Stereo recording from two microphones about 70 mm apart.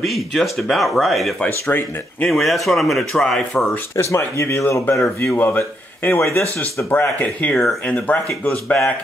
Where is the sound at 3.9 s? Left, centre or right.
Left.